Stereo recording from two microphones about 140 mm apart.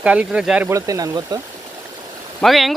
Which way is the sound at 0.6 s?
25° right (ahead or behind).